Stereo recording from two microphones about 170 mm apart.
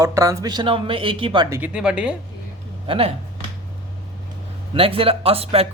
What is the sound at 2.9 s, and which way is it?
Speech, 35° right (ahead or behind).